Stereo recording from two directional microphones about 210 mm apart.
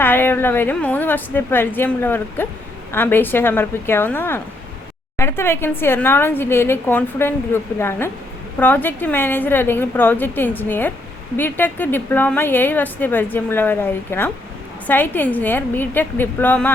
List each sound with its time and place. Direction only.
0.0 s a woman's voice: 10° left (ahead or behind)